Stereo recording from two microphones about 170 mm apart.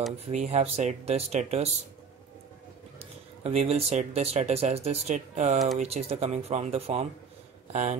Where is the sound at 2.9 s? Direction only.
40° right (ahead or behind).